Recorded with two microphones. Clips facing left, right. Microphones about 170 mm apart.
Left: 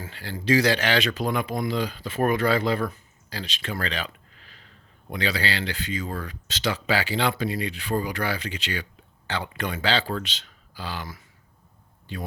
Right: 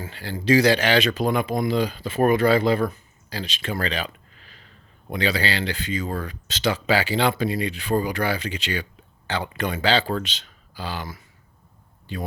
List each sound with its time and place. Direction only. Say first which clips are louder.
0.0 s speech: right 4 dB; 15° right (ahead or behind)
5.1 s speech: right 3 dB; 20° right (ahead or behind)
6.1 s speech: right 4 dB; 35° right (ahead or behind)
6.5 s speech: right 4 dB; 20° right (ahead or behind)